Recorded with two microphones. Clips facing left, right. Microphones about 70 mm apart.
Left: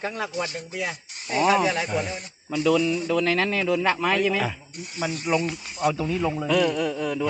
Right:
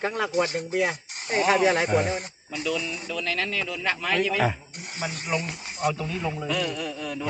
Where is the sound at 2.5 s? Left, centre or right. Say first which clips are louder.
Left 8 dB; left.